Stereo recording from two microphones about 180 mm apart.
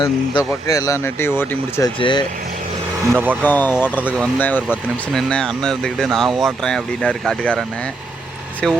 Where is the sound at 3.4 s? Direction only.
10° left (ahead or behind).